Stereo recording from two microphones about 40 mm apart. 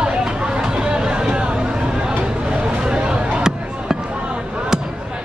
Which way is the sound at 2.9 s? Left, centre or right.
Right.